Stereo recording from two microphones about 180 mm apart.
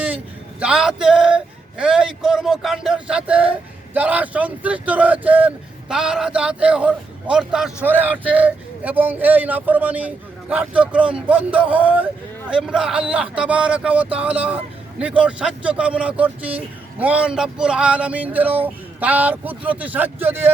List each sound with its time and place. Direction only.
0.6 s male singing: 5° right (ahead or behind)
1.8 s speech: 5° right (ahead or behind)